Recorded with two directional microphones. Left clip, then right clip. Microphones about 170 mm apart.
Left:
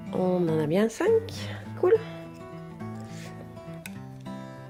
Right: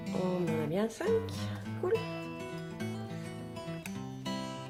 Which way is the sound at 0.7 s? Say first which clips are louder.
Left 8 dB; 55° left (ahead or behind).